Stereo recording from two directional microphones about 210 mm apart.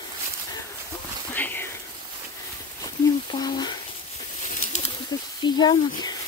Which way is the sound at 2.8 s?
20° left (ahead or behind).